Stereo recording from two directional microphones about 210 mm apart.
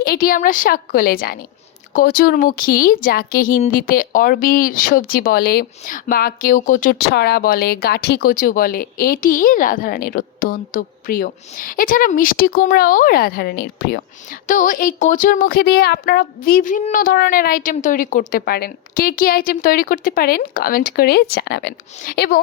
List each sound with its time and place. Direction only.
0.0 s speech: 45° left (ahead or behind)
14.4 s speech: 40° left (ahead or behind)